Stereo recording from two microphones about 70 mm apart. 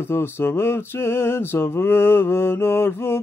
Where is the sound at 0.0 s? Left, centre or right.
Left.